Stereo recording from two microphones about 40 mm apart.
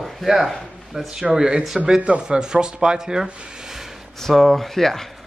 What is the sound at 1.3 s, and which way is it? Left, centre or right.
Speech, right.